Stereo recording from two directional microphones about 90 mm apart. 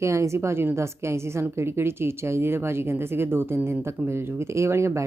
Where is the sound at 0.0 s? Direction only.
30° right (ahead or behind).